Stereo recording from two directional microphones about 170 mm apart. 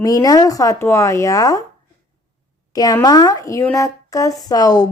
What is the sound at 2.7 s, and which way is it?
Speech, 20° left (ahead or behind).